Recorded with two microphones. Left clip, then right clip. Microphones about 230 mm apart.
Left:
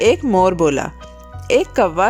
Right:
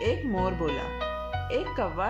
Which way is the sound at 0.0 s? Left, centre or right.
Left.